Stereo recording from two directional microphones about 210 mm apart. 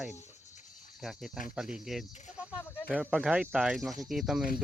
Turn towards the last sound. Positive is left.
turn(degrees=0)  # may be behind; listen again after turning